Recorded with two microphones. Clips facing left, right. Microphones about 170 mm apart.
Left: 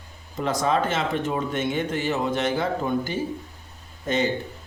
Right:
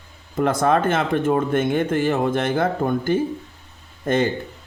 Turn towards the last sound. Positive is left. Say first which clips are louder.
# right 4 dB
turn(degrees=-50)  # may be behind; listen again after turning